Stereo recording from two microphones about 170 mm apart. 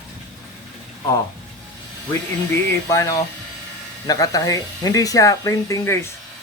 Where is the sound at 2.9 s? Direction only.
20° left (ahead or behind).